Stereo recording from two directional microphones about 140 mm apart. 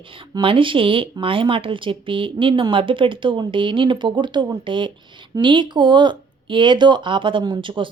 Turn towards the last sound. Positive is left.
turn(degrees=-35)  # may be behind; listen again after turning